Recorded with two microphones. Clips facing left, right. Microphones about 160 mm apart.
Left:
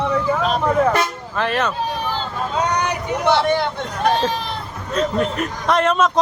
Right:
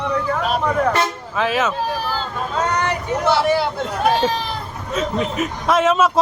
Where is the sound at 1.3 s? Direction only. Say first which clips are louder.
Right 1 dB; centre (ahead or behind).